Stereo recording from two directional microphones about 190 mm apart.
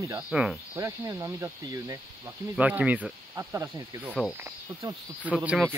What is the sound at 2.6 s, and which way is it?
Speech, 5° right (ahead or behind).